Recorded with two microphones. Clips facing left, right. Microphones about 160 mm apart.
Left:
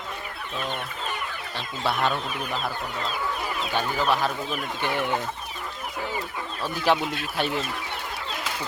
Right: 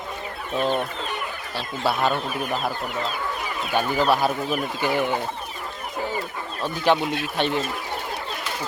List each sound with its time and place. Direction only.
0.6 s speech: 35° right (ahead or behind)
1.5 s a man's voice: 5° right (ahead or behind)
3.7 s a man's voice: 10° right (ahead or behind)
6.6 s a man's voice: 5° left (ahead or behind)